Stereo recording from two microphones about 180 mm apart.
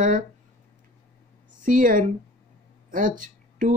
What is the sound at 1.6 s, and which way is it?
Speech, 50° right (ahead or behind).